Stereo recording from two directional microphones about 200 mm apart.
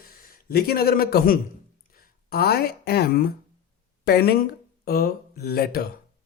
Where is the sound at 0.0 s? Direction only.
45° left (ahead or behind).